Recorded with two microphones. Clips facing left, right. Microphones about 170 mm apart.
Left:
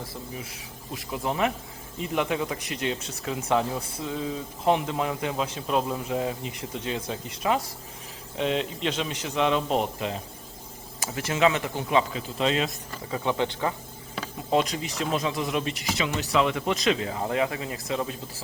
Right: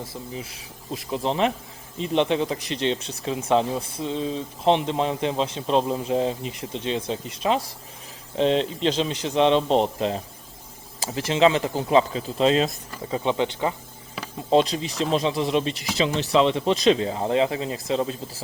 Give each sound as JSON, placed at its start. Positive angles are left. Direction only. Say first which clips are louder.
{"t": 0.0, "sound": "a man's voice", "louder": "right 3 dB", "side_deg": -25}
{"t": 13.1, "sound": "speech", "louder": "right 3 dB", "side_deg": -20}
{"t": 14.2, "sound": "a sound", "louder": "left 1 dB", "side_deg": -5}
{"t": 14.5, "sound": "speech", "louder": "right 5 dB", "side_deg": -30}